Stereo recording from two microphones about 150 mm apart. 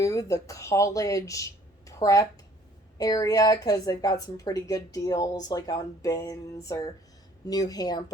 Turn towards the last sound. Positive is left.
turn(degrees=25)  # may be behind; listen again after turning